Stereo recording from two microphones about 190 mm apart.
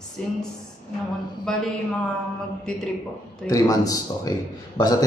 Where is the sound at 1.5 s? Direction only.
5° left (ahead or behind).